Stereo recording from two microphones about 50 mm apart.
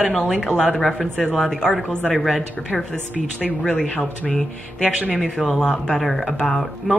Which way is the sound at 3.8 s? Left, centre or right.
Centre.